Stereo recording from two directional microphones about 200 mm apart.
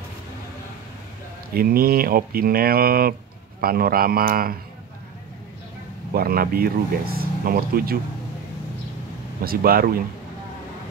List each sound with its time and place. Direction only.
1.5 s speech: 50° right (ahead or behind)
6.1 s speech: 45° right (ahead or behind)
9.4 s speech: 50° right (ahead or behind)